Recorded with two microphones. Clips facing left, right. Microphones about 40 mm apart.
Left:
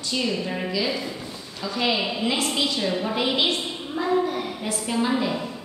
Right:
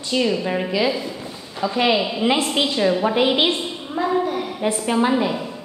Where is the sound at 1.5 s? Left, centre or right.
Right.